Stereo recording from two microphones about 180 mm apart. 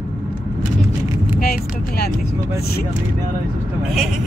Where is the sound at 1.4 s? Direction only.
60° left (ahead or behind).